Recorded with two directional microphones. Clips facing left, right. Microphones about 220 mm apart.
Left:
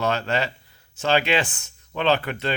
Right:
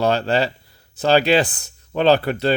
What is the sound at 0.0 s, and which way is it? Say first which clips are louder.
Speech: right 5 dB; 35° right (ahead or behind).